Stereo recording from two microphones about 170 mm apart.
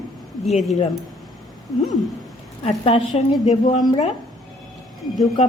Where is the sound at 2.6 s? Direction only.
35° left (ahead or behind).